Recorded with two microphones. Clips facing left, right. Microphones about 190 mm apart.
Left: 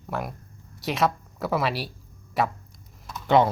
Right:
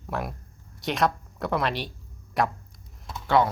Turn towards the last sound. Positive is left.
turn(degrees=20)  # may be behind; listen again after turning